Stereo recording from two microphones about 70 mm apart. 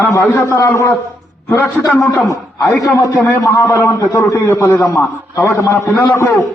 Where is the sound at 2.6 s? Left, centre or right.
Left.